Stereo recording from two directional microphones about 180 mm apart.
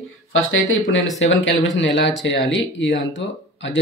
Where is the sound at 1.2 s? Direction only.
85° left.